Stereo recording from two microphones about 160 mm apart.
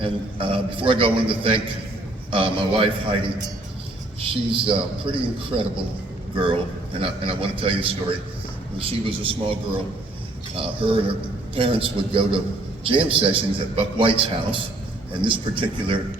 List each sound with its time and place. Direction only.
0.0 s a man's voice: 35° right (ahead or behind)